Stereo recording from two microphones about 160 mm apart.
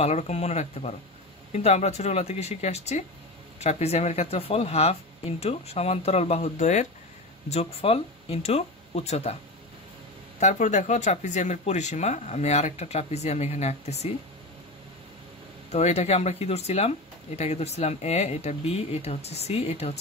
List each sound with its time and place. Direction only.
0.0 s speech: 45° left (ahead or behind)
10.4 s speech: 50° left (ahead or behind)
15.7 s speech: 45° left (ahead or behind)